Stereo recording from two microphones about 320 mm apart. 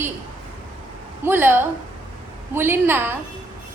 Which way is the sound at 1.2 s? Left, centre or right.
Centre.